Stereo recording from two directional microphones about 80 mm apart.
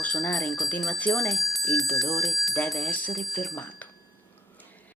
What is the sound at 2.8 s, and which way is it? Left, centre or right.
Speech, centre.